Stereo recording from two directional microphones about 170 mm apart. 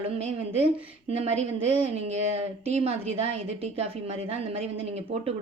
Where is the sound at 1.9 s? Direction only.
40° right (ahead or behind).